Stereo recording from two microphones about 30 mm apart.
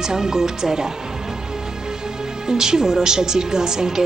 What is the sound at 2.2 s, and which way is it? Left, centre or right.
A woman's voice, right.